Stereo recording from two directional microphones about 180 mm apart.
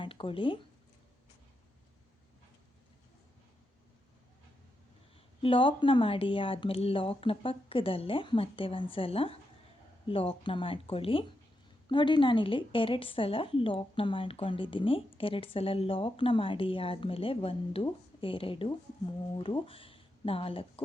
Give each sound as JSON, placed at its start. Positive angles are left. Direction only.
{"t": 0.0, "sound": "speech", "side_deg": 30}
{"t": 5.4, "sound": "speech", "side_deg": 30}